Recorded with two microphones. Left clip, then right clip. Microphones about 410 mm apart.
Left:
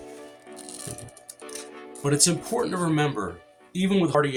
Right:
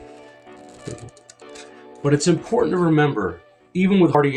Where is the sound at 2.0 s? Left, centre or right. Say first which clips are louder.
Right 5 dB; left.